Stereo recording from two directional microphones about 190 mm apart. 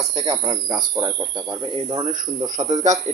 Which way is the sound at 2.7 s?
40° right (ahead or behind).